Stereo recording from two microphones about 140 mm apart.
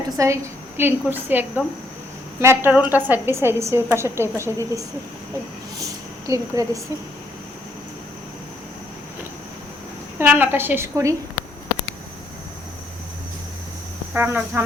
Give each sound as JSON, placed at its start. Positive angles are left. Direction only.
{"t": 0.2, "sound": "a woman's voice", "side_deg": -25}
{"t": 10.2, "sound": "a woman's voice", "side_deg": -15}
{"t": 14.1, "sound": "a woman's voice", "side_deg": -15}